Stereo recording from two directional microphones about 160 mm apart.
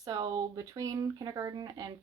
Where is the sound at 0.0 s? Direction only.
25° right (ahead or behind).